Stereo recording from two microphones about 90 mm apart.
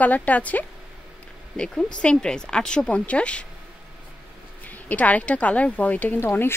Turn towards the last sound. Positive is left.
turn(degrees=25)  # may be behind; listen again after turning